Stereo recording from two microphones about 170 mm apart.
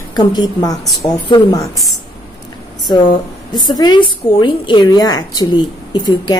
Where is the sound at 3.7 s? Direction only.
25° left (ahead or behind).